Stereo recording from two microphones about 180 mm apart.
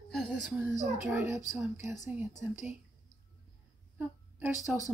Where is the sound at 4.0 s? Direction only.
10° right (ahead or behind).